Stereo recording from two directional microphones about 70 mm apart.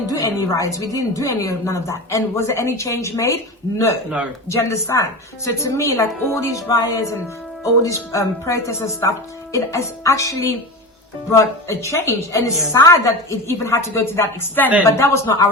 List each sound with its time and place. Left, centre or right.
0.1 s a woman's voice: left